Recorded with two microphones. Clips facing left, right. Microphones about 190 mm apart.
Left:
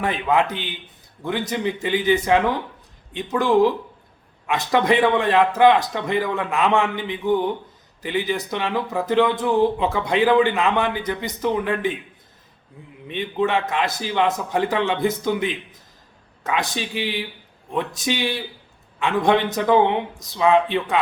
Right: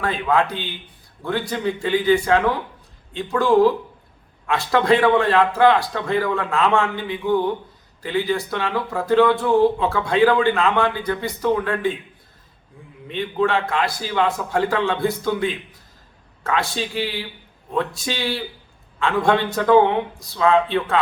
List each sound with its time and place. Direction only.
0.0 s a man's voice: 20° left (ahead or behind)
13.1 s a man's voice: 20° left (ahead or behind)